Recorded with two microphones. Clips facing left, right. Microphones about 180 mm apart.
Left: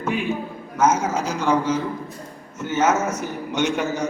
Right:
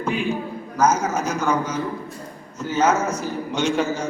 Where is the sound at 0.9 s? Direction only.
30° left (ahead or behind).